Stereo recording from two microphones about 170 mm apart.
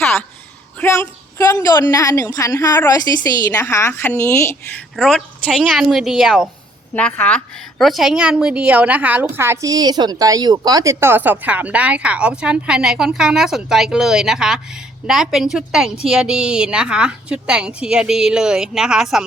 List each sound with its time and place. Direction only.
0.8 s a woman's voice: 15° left (ahead or behind)
4.9 s a woman's voice: centre (ahead or behind)